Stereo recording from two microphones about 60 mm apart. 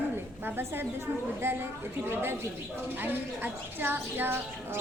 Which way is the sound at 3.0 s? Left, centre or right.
Right.